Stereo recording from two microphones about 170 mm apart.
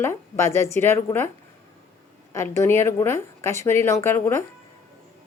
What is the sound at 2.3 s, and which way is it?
Speech, 15° left (ahead or behind).